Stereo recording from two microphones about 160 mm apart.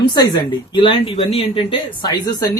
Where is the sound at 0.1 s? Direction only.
25° left (ahead or behind).